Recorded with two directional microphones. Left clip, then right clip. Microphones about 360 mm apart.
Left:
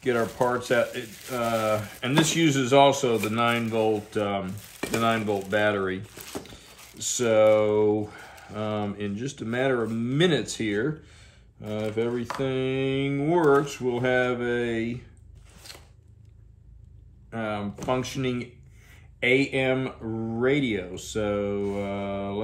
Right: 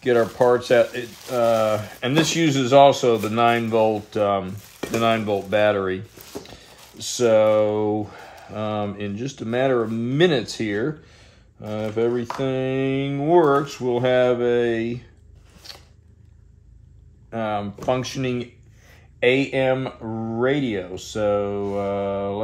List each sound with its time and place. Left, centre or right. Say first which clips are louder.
0.0 s speech: right 7 dB; right
17.3 s speech: right 6 dB; right